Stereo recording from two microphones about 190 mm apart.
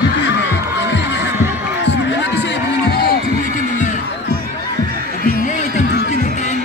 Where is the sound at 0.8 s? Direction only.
65° left (ahead or behind).